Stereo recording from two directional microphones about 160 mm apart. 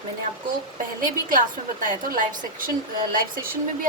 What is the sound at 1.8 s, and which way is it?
A woman's voice, 55° right (ahead or behind).